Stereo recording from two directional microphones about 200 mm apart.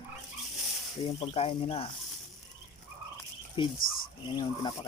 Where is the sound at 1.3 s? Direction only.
30° left (ahead or behind).